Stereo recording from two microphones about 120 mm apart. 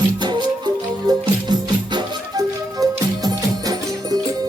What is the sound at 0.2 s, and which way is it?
Music, 40° right (ahead or behind).